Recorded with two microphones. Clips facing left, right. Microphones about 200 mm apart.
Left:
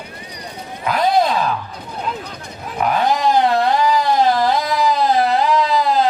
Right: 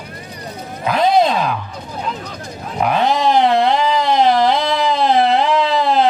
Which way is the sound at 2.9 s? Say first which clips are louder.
Right 1 dB; 25° right (ahead or behind).